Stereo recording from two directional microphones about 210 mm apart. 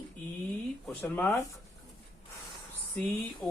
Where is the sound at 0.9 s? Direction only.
5° left (ahead or behind).